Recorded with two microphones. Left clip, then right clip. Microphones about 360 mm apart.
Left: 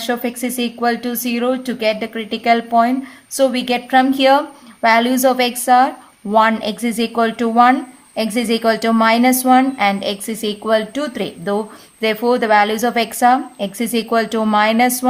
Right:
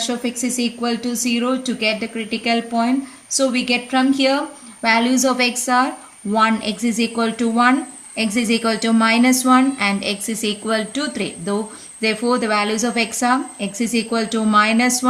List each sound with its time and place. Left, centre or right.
0.1 s speech: centre